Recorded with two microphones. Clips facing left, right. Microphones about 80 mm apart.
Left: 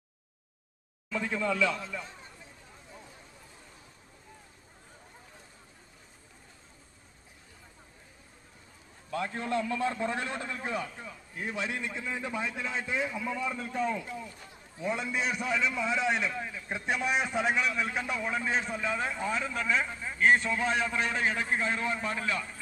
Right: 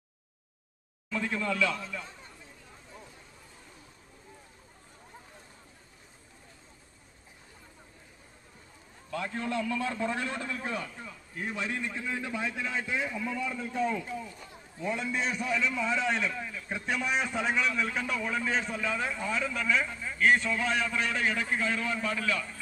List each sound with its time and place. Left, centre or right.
1.1 s a man's voice: centre
9.3 s a man's voice: left
13.1 s a man's voice: centre
14.8 s a man's voice: centre